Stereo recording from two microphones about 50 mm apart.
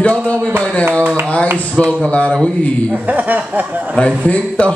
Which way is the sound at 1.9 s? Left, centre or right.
Left.